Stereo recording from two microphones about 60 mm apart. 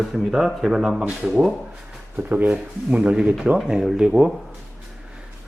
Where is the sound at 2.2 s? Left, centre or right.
Right.